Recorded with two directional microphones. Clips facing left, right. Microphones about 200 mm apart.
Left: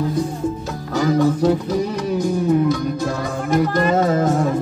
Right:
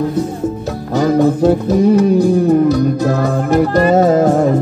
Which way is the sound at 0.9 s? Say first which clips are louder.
Right 5 dB; 55° right (ahead or behind).